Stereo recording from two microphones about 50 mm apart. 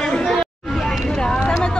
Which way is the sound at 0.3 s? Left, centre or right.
Centre.